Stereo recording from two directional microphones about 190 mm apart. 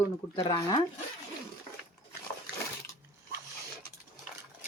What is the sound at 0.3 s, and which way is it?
Speech, 25° left (ahead or behind).